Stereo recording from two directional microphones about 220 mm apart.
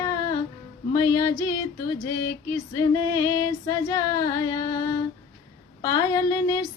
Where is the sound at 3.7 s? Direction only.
15° left (ahead or behind).